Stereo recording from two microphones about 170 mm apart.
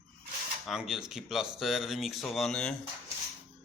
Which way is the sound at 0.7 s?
5° right (ahead or behind).